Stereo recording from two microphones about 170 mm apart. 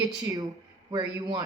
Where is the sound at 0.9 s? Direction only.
30° right (ahead or behind).